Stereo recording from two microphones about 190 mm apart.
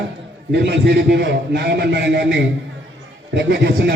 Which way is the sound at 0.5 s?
65° right (ahead or behind).